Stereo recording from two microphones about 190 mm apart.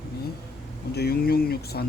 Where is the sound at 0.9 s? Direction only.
55° left (ahead or behind).